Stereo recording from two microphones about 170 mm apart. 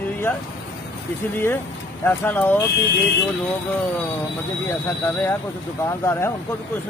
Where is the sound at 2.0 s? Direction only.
10° left (ahead or behind).